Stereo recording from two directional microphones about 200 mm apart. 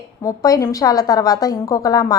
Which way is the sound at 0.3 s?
15° left (ahead or behind).